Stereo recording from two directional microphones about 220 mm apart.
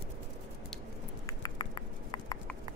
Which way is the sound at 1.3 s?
20° left (ahead or behind).